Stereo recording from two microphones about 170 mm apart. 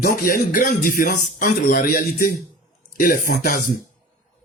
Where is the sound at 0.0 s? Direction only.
55° left (ahead or behind).